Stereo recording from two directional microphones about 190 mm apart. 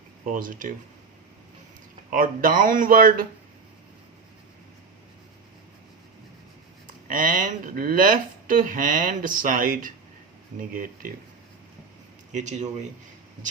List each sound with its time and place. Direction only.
0.3 s speech: 45° right (ahead or behind)
2.1 s speech: 45° right (ahead or behind)
7.1 s speech: 45° right (ahead or behind)
12.3 s speech: 40° right (ahead or behind)